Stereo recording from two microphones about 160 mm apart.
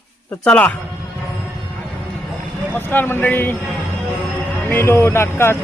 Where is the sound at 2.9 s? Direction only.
10° left (ahead or behind).